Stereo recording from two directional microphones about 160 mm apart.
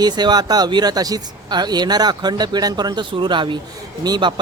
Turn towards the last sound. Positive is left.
turn(degrees=-25)  # may be behind; listen again after turning